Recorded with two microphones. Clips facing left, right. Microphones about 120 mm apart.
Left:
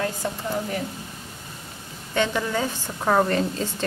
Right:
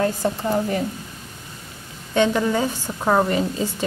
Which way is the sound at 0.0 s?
35° right (ahead or behind).